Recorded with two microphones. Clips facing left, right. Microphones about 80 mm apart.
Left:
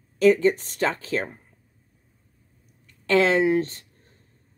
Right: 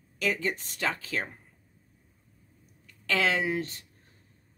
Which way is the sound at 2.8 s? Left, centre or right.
Left.